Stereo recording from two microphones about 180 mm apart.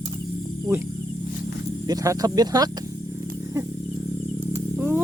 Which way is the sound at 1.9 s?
20° right (ahead or behind).